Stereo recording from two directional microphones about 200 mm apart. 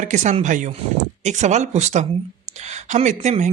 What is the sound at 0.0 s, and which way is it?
Speech, 35° right (ahead or behind).